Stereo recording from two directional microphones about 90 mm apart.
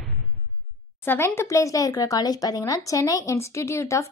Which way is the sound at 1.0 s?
25° left (ahead or behind).